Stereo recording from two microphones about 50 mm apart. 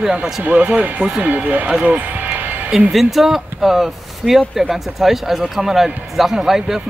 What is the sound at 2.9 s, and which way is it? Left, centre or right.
A man's voice, centre.